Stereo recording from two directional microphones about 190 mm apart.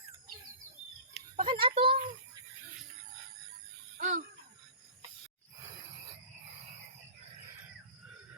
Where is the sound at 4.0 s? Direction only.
40° right (ahead or behind).